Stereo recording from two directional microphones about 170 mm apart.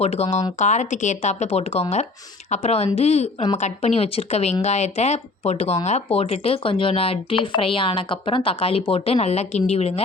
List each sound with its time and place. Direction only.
0.0 s speech: 40° left (ahead or behind)